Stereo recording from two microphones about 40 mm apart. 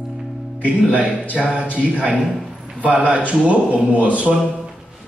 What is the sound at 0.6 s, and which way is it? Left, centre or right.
A man's voice, right.